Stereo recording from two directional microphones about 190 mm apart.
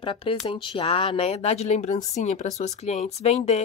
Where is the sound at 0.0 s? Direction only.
30° left (ahead or behind).